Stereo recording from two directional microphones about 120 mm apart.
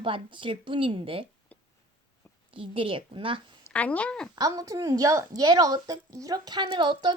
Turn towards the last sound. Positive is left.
turn(degrees=-40)  # may be behind; listen again after turning